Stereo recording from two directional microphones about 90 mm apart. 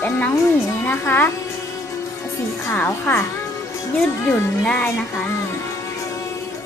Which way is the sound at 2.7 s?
20° left (ahead or behind).